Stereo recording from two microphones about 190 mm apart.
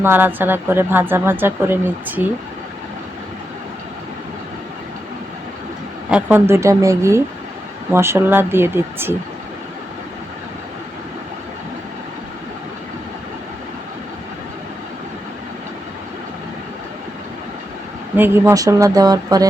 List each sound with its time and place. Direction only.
0.0 s speech: 10° right (ahead or behind)
6.1 s speech: 5° right (ahead or behind)
18.2 s speech: 15° right (ahead or behind)